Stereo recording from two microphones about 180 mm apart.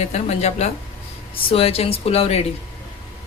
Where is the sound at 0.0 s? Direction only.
35° left (ahead or behind).